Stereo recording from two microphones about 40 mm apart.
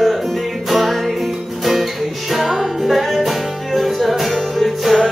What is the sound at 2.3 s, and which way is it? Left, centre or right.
Music, centre.